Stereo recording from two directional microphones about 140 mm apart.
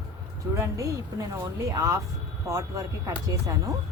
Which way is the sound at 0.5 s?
20° right (ahead or behind).